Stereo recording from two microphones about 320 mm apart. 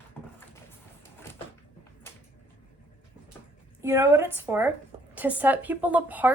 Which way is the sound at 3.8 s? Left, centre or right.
Centre.